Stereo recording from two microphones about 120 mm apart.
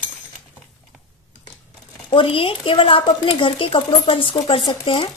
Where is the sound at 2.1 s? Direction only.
50° left (ahead or behind).